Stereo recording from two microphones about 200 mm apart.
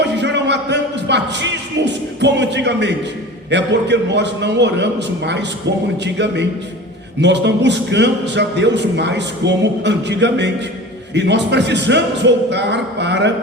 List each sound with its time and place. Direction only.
0.0 s music: 60° right (ahead or behind)
3.5 s a man's voice: 60° right (ahead or behind)